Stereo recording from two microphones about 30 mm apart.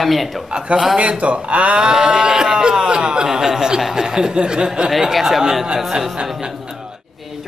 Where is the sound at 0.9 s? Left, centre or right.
Right.